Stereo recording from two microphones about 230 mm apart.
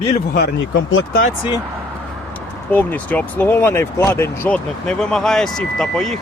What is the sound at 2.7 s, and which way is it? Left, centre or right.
Speech, centre.